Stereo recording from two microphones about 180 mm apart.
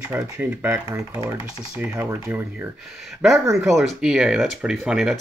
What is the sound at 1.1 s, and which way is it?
Speech, 20° right (ahead or behind).